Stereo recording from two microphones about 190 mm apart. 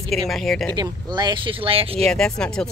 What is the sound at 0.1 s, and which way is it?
Speech, centre (ahead or behind).